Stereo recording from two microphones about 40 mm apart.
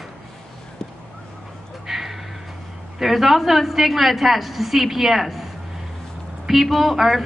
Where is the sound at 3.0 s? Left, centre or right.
Centre.